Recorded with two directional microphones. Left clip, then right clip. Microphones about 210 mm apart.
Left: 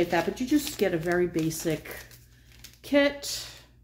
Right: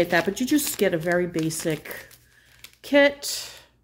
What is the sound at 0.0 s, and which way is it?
Speech, 40° right (ahead or behind).